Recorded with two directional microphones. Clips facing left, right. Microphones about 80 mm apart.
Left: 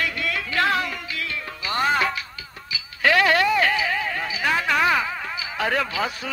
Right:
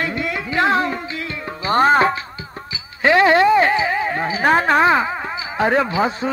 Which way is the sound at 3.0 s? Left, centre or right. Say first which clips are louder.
Right 6 dB; right.